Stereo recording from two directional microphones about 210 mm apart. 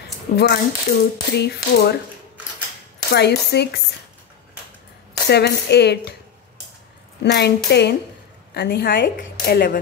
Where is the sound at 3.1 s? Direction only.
50° left (ahead or behind).